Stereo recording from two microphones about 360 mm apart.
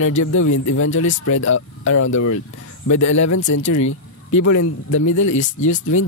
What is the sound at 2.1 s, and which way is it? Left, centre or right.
A man's voice, left.